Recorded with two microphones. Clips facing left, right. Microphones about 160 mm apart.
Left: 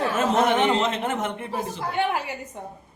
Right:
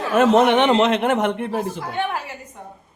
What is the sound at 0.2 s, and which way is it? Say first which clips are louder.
A man's voice: right 7 dB; 70° right (ahead or behind).